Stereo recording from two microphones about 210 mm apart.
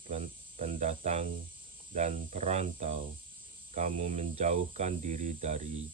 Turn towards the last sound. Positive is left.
turn(degrees=-35)  # may be behind; listen again after turning